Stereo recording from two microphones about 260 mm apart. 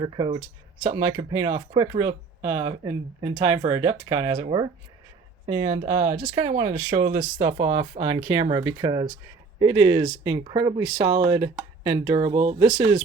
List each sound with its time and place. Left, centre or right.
0.0 s speech: centre